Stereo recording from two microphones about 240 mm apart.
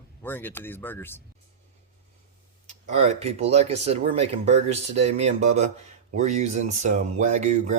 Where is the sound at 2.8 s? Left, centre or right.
Right.